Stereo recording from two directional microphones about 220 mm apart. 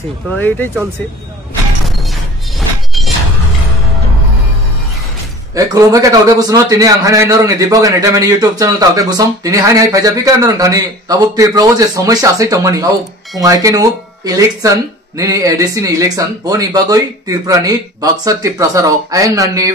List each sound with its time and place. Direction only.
0.3 s speech: 10° left (ahead or behind)
5.5 s a man's voice: 15° right (ahead or behind)